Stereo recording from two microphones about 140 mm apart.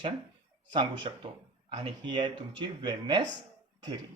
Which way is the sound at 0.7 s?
35° right (ahead or behind).